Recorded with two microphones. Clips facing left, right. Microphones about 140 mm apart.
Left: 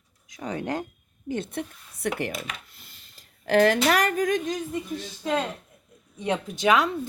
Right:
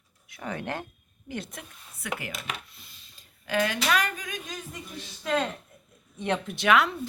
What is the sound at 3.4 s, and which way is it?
Speech, 50° left (ahead or behind).